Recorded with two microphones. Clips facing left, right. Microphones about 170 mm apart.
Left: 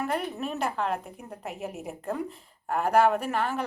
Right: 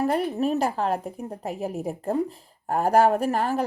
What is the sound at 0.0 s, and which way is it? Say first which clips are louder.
A woman's voice: right 7 dB; 35° right (ahead or behind).